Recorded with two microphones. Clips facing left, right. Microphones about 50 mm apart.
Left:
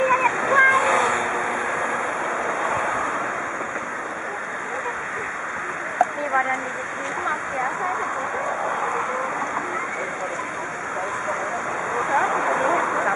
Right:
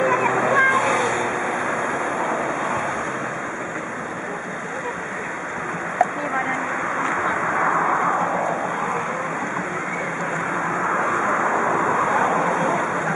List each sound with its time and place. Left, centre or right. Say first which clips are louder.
0.0 s waterfall: even; centre
0.3 s waterfall: right 2 dB; centre
0.6 s vehicle: left 4 dB; centre
12.1 s vehicle: right 1 dB; centre